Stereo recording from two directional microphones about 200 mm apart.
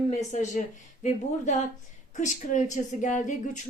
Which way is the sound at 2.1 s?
40° left (ahead or behind).